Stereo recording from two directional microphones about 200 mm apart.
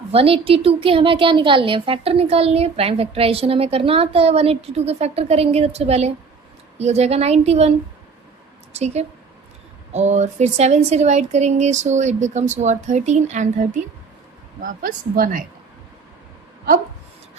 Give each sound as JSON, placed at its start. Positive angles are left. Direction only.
{"t": 0.1, "sound": "a woman's voice", "side_deg": -30}
{"t": 8.7, "sound": "a woman's voice", "side_deg": -35}